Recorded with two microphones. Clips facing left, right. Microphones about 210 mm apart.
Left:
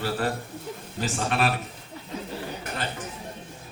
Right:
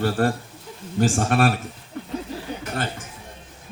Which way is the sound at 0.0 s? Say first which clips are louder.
Right 6 dB; 45° right (ahead or behind).